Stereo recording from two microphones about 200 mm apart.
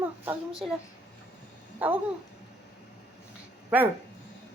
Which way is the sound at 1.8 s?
10° right (ahead or behind).